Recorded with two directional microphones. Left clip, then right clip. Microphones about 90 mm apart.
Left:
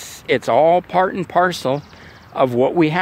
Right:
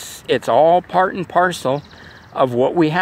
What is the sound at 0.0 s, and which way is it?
Speech, 25° left (ahead or behind).